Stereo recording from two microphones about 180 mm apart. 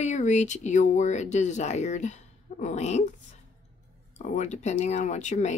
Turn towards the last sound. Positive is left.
turn(degrees=40)  # may be behind; listen again after turning